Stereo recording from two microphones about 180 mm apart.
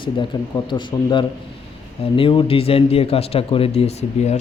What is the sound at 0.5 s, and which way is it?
Speech, 25° left (ahead or behind).